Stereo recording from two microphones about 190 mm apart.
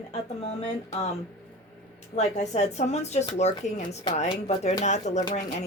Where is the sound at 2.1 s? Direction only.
35° left (ahead or behind).